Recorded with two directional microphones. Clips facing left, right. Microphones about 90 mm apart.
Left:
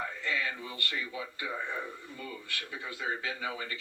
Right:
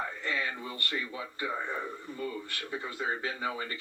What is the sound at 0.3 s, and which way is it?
A man's voice, 35° right (ahead or behind).